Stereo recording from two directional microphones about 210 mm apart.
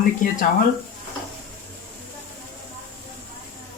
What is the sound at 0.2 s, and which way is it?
Speech, 40° left (ahead or behind).